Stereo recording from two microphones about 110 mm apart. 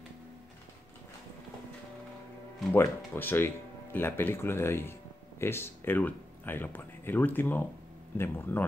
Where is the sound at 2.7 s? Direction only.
20° left (ahead or behind).